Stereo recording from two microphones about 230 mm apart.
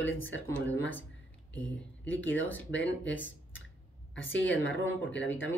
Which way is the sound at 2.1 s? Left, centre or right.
Left.